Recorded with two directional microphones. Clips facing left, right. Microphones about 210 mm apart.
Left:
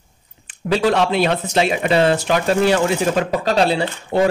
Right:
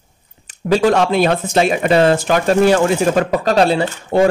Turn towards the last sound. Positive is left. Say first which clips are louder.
# right 3 dB
turn(degrees=-50)  # may be behind; listen again after turning